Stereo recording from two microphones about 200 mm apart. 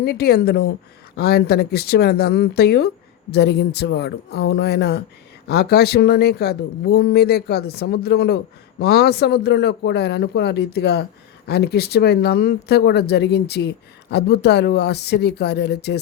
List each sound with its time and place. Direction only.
0.0 s speech: 50° left (ahead or behind)